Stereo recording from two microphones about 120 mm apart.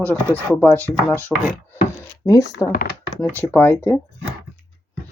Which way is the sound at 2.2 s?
30° left (ahead or behind).